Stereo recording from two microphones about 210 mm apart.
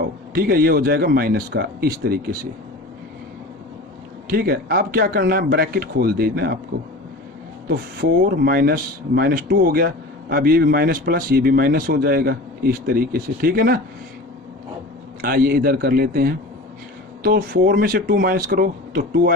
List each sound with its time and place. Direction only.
0.0 s speech: 45° right (ahead or behind)
4.3 s speech: 45° right (ahead or behind)
8.0 s speech: 50° right (ahead or behind)
15.2 s speech: 45° right (ahead or behind)